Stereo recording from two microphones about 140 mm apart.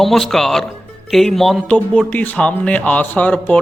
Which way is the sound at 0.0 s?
Centre (ahead or behind).